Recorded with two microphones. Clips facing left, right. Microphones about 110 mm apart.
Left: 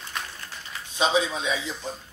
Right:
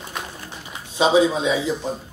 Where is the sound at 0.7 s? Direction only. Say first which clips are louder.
Right 7 dB; 15° right (ahead or behind).